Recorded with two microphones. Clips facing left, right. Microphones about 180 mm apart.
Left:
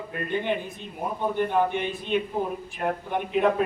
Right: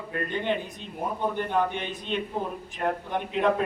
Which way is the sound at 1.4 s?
10° left (ahead or behind).